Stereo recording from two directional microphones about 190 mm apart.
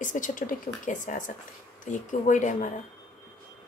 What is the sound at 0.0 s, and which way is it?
A woman's voice, 45° left (ahead or behind).